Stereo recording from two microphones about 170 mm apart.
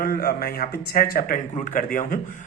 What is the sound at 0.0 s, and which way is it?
A man's voice, 60° left (ahead or behind).